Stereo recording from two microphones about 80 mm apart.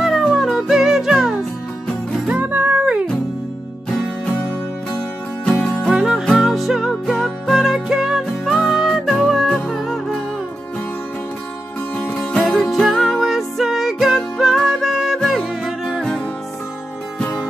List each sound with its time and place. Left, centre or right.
0.0 s music: centre
2.3 s music: right
5.9 s music: centre
12.2 s music: centre